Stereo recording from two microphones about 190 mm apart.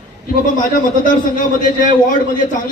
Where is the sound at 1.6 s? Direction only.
45° left (ahead or behind).